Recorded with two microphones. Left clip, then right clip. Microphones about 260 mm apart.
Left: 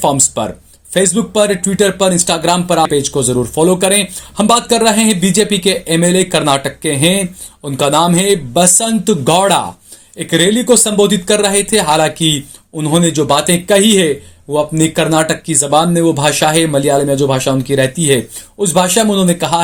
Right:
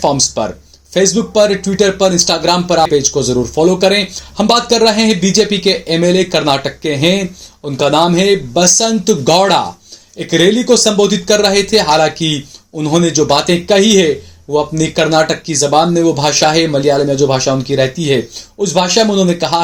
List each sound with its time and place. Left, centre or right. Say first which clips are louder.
0.0 s speech: right 1 dB; left